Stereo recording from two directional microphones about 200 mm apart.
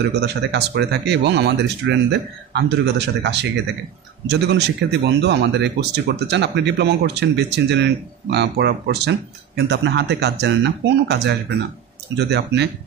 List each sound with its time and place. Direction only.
0.1 s speech: 55° right (ahead or behind)